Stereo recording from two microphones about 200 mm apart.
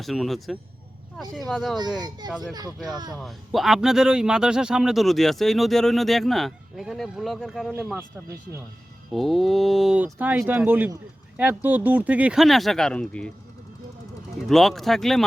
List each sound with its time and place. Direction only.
0.0 s speech: centre (ahead or behind)
2.0 s speech: 20° right (ahead or behind)
3.2 s speech: centre (ahead or behind)
9.1 s speech: centre (ahead or behind)
14.4 s speech: centre (ahead or behind)